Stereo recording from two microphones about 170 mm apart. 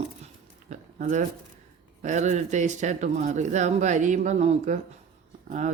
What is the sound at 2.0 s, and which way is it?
Speech, 45° right (ahead or behind).